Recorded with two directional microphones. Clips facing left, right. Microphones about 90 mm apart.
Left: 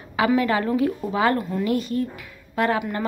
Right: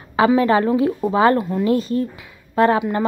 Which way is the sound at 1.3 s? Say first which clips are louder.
Right 5 dB; 25° right (ahead or behind).